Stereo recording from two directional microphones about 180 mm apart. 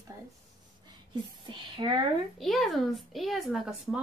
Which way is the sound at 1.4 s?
25° right (ahead or behind).